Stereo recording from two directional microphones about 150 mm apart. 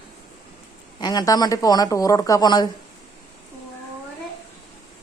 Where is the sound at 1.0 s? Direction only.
25° left (ahead or behind).